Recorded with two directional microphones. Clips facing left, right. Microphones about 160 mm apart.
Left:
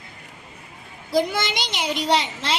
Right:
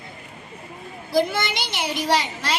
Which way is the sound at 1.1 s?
20° left (ahead or behind).